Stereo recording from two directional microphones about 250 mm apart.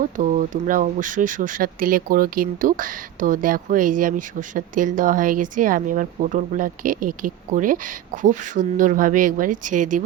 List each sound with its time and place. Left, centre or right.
0.0 s speech: right